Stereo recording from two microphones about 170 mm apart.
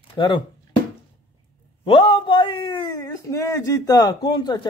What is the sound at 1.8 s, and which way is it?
Speech, 30° left (ahead or behind).